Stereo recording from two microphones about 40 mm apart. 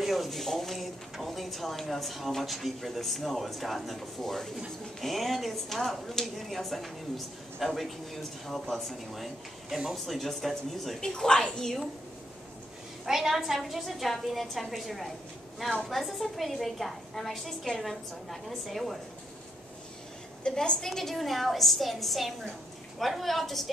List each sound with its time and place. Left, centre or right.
0.0 s speech: centre
11.0 s speech: centre
13.0 s speech: centre
20.4 s speech: left; by 23.7 s centre